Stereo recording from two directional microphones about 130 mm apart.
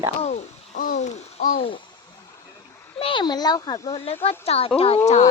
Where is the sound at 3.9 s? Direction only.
50° left (ahead or behind).